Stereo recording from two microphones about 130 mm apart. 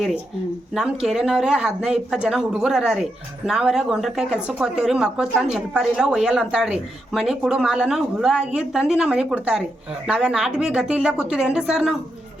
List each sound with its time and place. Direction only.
0.7 s speech: 5° right (ahead or behind)